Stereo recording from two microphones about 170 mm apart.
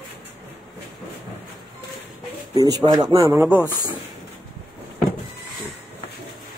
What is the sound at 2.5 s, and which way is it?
Speech, 25° right (ahead or behind).